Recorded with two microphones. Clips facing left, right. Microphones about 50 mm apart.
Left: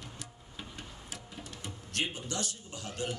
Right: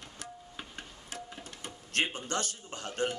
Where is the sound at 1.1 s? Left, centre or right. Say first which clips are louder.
Right 4 dB; right.